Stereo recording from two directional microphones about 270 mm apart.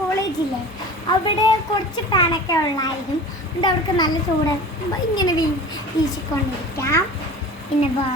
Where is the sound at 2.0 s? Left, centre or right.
Centre.